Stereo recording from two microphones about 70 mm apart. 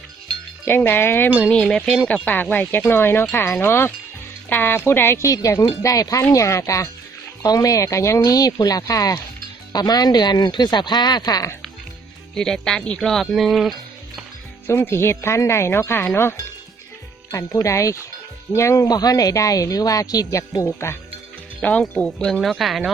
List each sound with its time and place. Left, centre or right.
0.8 s speech: left
1.5 s speech: centre
2.2 s speech: left
6.3 s speech: left
7.4 s speech: left
8.2 s speech: left
9.7 s speech: left
12.3 s speech: centre
14.7 s speech: left
17.3 s speech: left
18.9 s speech: left
20.7 s speech: left
21.6 s speech: centre
21.9 s speech: centre